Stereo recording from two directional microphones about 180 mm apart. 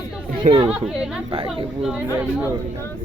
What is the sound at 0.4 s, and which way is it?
Speech, 45° right (ahead or behind).